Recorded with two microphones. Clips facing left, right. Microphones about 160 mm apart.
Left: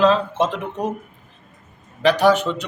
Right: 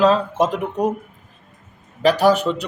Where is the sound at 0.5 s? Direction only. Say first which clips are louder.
Right 4 dB; 35° right (ahead or behind).